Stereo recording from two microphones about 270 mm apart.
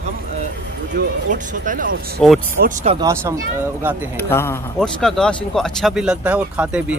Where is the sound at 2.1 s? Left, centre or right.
Centre.